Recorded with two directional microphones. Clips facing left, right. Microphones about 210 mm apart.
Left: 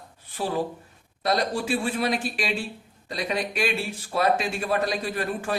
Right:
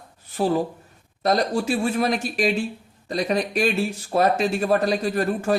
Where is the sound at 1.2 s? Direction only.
45° right (ahead or behind).